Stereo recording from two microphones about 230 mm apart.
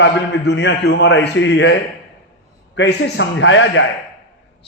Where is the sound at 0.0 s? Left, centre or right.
Left.